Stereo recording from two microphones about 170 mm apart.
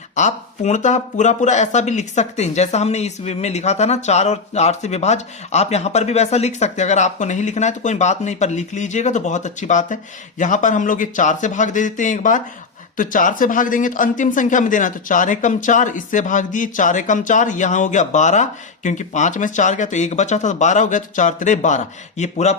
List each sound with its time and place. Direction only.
0.2 s speech: 45° left (ahead or behind)